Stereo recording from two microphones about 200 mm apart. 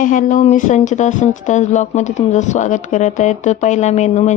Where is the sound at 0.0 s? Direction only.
40° left (ahead or behind).